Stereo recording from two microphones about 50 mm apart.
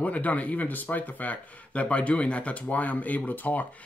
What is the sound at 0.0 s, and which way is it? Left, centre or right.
Speech, left.